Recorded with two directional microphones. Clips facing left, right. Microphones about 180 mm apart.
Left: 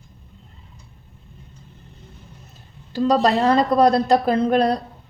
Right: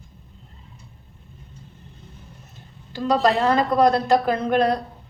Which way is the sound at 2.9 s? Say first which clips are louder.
Left 2 dB; 35° left (ahead or behind).